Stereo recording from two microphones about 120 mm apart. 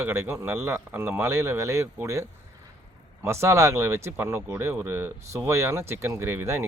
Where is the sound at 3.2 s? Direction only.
25° right (ahead or behind).